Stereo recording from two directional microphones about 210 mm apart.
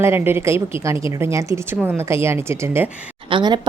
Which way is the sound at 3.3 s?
20° right (ahead or behind).